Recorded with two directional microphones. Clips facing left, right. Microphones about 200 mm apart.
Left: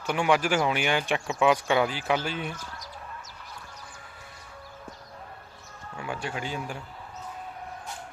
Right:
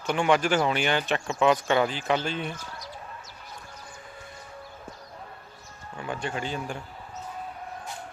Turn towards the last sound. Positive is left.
turn(degrees=10)  # may be behind; listen again after turning